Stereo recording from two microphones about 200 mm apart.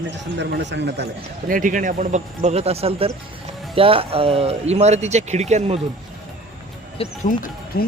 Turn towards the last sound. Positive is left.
turn(degrees=40)  # may be behind; listen again after turning